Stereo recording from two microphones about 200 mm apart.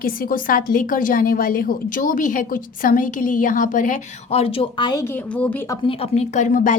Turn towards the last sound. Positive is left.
turn(degrees=40)  # may be behind; listen again after turning